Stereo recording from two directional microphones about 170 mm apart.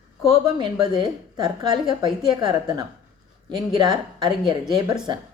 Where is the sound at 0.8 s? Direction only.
25° right (ahead or behind).